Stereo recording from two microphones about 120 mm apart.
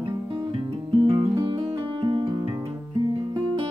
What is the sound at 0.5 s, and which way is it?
Music, 50° right (ahead or behind).